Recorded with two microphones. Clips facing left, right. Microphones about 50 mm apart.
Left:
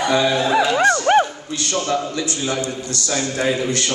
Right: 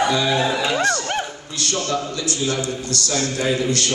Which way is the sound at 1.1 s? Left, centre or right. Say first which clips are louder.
Left 10 dB; left.